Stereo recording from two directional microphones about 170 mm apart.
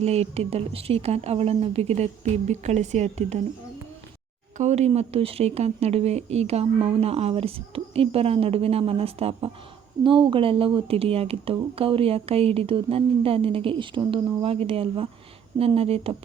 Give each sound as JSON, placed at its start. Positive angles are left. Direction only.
{"t": 0.0, "sound": "speech", "side_deg": -40}
{"t": 4.5, "sound": "speech", "side_deg": -40}